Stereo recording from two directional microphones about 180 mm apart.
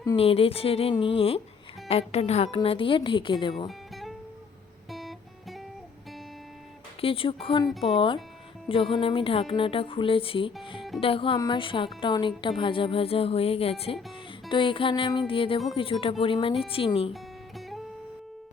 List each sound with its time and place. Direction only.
0.2 s a woman's voice: 35° left (ahead or behind)
3.7 s music: centre (ahead or behind)
7.0 s a woman's voice: 30° left (ahead or behind)